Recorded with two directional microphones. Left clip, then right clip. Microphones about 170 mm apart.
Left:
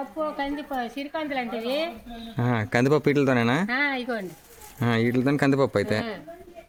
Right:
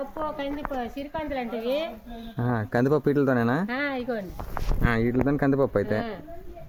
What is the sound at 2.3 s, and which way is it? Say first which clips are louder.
Speech: left 2 dB; 40° left (ahead or behind).